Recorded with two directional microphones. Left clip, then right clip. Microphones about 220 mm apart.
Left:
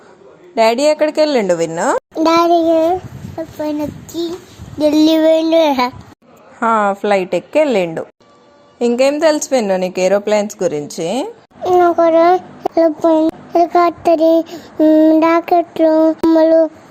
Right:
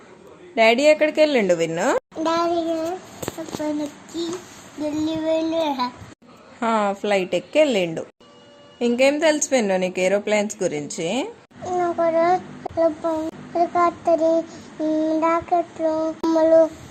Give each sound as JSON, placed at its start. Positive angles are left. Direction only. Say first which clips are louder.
{"t": 0.5, "sound": "a woman's voice", "louder": "left 3 dB", "side_deg": 10}
{"t": 2.1, "sound": "a child's voice", "louder": "left 9 dB", "side_deg": 30}
{"t": 4.1, "sound": "child singing", "louder": "left 5 dB", "side_deg": 45}
{"t": 6.6, "sound": "a woman's voice", "louder": "left 7 dB", "side_deg": 10}
{"t": 11.6, "sound": "a child's voice", "louder": "left 10 dB", "side_deg": 30}
{"t": 12.7, "sound": "child singing", "louder": "left 9 dB", "side_deg": 45}